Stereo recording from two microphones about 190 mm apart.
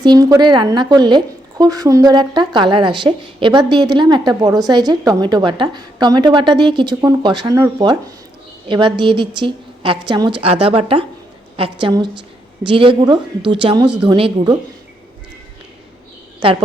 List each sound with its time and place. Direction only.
0.0 s a woman's voice: 20° right (ahead or behind)
13.8 s speech: 5° right (ahead or behind)
14.1 s a woman's voice: 25° right (ahead or behind)
16.4 s a woman's voice: 25° right (ahead or behind)